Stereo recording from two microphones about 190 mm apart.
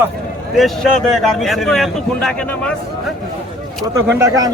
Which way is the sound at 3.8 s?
15° right (ahead or behind).